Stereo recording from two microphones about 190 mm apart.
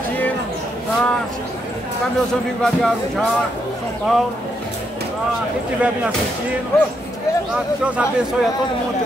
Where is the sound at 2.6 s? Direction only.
Centre (ahead or behind).